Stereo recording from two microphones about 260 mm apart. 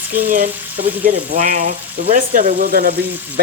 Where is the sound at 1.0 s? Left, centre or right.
Right.